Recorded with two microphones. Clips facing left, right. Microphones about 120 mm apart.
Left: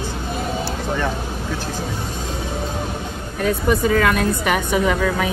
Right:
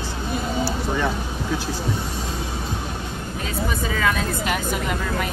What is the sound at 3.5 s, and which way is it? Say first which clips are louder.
Speech: left 9 dB; 55° left (ahead or behind).